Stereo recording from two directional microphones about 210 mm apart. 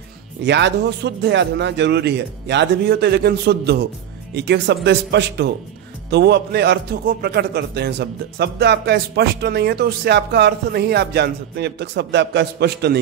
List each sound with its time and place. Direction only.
0.5 s a man's voice: 55° right (ahead or behind)